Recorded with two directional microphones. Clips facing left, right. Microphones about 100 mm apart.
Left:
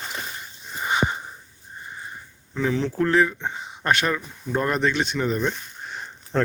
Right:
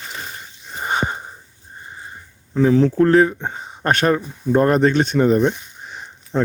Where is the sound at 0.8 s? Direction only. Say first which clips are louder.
Right 2 dB; 45° right (ahead or behind).